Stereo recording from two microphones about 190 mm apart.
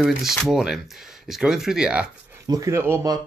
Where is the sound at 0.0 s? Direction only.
Centre (ahead or behind).